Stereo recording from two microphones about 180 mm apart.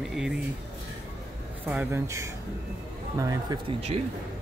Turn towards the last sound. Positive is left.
turn(degrees=-35)  # may be behind; listen again after turning